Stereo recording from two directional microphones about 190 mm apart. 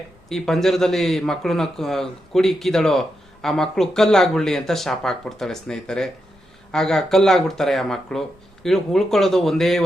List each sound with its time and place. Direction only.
0.3 s speech: centre (ahead or behind)